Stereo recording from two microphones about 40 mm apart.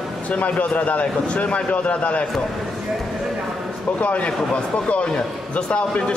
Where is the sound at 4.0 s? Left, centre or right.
Left.